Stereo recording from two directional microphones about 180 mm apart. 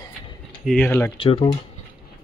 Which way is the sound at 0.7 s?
5° left (ahead or behind).